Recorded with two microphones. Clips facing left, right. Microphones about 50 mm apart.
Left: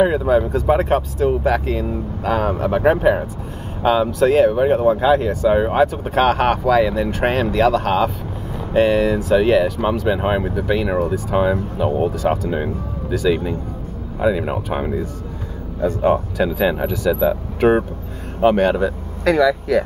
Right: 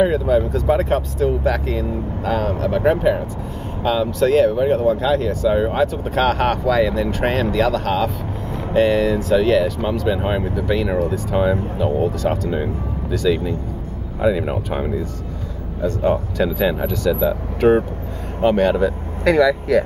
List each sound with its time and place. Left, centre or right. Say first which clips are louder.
0.0 s speech: left 1 dB; centre